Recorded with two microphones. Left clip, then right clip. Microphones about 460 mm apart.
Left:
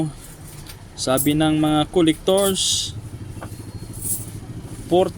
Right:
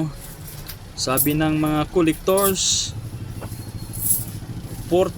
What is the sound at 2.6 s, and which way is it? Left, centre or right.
Speech, right.